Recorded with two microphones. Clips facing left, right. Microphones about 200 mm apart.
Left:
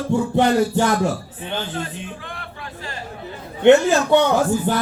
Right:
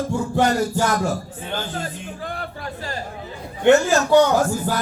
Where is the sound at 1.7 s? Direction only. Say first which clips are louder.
Left 1 dB; 40° right (ahead or behind).